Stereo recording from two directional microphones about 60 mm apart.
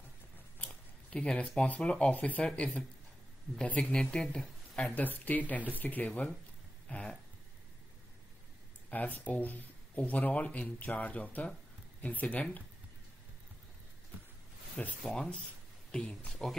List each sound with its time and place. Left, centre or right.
0.7 s speech: centre
4.9 s speech: left
8.9 s speech: left
14.8 s speech: centre